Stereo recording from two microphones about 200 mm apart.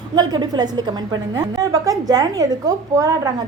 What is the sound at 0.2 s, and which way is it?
A woman's voice, 20° right (ahead or behind).